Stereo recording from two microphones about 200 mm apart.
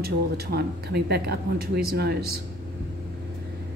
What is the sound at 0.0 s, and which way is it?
Speech, 50° right (ahead or behind).